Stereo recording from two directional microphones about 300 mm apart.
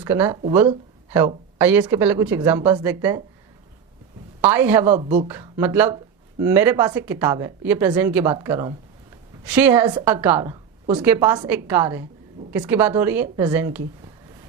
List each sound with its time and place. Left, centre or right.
0.0 s a woman's voice: centre
4.4 s a woman's voice: centre
4.9 s a woman's voice: right
5.3 s a woman's voice: centre